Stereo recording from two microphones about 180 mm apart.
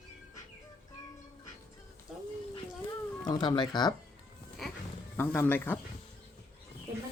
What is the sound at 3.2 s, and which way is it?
Speech, 20° left (ahead or behind).